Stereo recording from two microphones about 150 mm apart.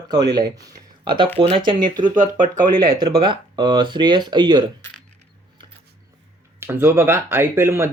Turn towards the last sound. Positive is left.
turn(degrees=-15)  # may be behind; listen again after turning